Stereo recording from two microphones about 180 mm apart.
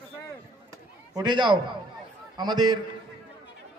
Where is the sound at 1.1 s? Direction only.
25° right (ahead or behind).